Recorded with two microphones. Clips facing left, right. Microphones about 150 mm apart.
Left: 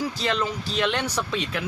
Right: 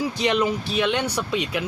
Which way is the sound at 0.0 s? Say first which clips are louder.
Right 4 dB; 15° right (ahead or behind).